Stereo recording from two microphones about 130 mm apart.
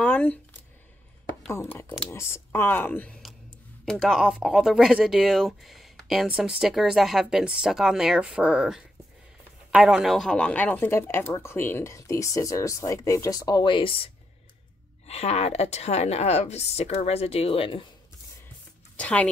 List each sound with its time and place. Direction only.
0.0 s a sound: 10° left (ahead or behind)
1.5 s speech: 20° left (ahead or behind)
3.8 s speech: centre (ahead or behind); by 14.1 s 40° left (ahead or behind)
15.0 s a woman's voice: 55° left (ahead or behind)
18.9 s a woman's voice: 10° left (ahead or behind)